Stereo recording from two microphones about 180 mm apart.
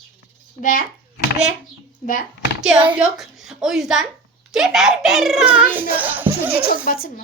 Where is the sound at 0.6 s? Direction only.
50° left (ahead or behind).